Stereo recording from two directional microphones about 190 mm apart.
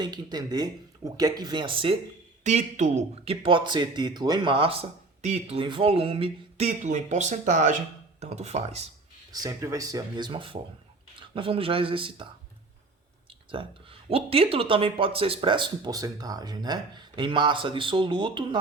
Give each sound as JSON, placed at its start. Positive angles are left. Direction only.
{"t": 0.0, "sound": "a man's voice", "side_deg": -20}
{"t": 2.4, "sound": "a man's voice", "side_deg": -40}
{"t": 9.3, "sound": "a man's voice", "side_deg": -20}
{"t": 13.6, "sound": "a man's voice", "side_deg": -25}